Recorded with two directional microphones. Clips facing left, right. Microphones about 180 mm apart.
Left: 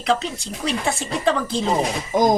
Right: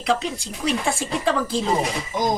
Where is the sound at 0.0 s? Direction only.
10° right (ahead or behind).